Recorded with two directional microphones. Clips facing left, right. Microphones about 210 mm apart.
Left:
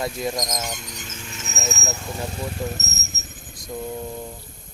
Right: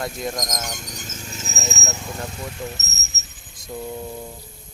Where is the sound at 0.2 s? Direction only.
Centre (ahead or behind).